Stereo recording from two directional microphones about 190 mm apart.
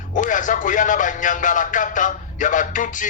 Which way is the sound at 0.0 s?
40° left (ahead or behind).